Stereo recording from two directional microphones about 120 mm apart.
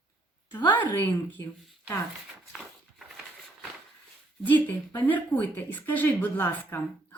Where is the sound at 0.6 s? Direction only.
15° left (ahead or behind).